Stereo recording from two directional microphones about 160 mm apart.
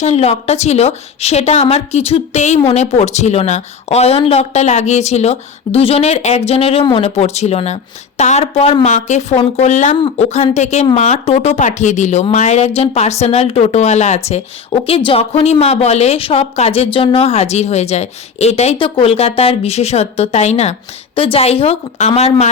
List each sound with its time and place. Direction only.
0.0 s a woman's voice: 45° left (ahead or behind)